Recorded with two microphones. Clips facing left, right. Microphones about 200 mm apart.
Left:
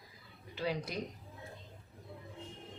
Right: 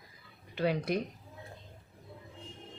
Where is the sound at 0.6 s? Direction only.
60° right (ahead or behind).